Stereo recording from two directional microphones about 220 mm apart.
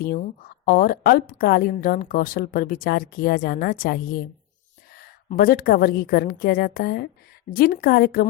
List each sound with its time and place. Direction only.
0.0 s a woman's voice: 45° left (ahead or behind)